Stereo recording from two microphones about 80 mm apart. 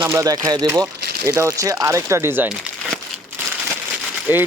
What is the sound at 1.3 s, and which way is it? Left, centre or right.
Speech, right.